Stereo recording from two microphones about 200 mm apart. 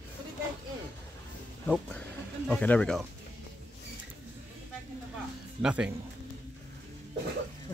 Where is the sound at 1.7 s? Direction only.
5° left (ahead or behind).